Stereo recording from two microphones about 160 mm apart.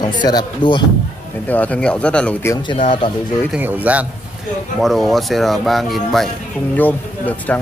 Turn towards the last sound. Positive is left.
turn(degrees=10)  # may be behind; listen again after turning